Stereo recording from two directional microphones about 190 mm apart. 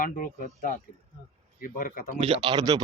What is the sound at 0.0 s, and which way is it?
Speech, 45° left (ahead or behind).